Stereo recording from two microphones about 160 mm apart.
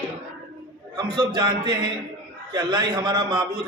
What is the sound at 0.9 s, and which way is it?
A man's voice, 30° right (ahead or behind).